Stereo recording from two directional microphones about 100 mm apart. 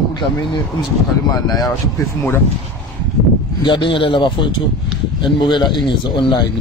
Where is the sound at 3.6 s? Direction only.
55° left (ahead or behind).